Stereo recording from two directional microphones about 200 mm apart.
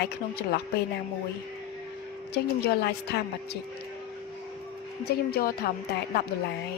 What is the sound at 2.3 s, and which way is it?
A woman's voice, 55° left (ahead or behind).